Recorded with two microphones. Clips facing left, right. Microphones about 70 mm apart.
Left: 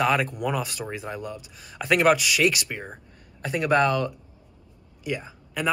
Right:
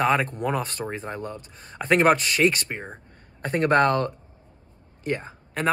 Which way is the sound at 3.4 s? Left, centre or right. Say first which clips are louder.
Right 2 dB; right.